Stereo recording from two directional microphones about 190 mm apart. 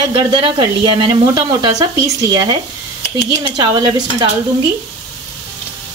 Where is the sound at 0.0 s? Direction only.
25° right (ahead or behind).